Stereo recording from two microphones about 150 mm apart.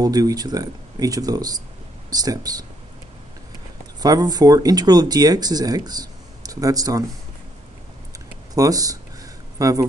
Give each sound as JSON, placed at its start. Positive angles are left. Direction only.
{"t": 0.0, "sound": "speech", "side_deg": -25}
{"t": 4.0, "sound": "speech", "side_deg": -25}
{"t": 8.5, "sound": "speech", "side_deg": -25}